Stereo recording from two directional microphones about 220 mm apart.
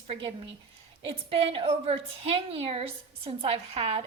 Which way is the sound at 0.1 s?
25° right (ahead or behind).